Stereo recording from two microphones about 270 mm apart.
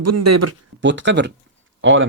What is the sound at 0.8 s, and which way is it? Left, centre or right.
Speech, right.